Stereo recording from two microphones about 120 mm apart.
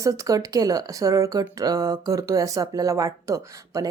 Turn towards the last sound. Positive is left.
turn(degrees=-25)  # may be behind; listen again after turning